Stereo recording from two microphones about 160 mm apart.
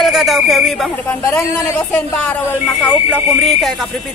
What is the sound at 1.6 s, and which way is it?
Speech, 10° left (ahead or behind).